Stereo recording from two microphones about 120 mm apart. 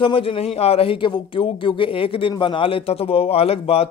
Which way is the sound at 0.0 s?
45° left (ahead or behind).